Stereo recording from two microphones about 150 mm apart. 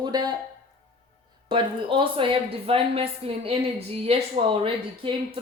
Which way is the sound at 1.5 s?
35° right (ahead or behind).